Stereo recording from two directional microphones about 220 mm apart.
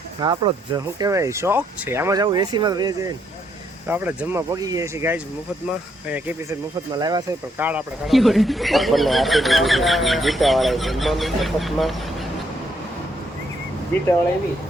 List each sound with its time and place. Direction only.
0.2 s speech: 20° right (ahead or behind)
6.9 s speech: 20° right (ahead or behind)
7.7 s speech: 5° right (ahead or behind)